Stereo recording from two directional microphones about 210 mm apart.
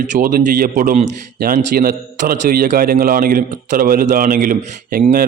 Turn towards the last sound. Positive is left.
turn(degrees=-45)  # may be behind; listen again after turning